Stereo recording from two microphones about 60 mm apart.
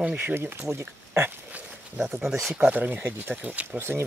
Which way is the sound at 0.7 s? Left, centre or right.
Right.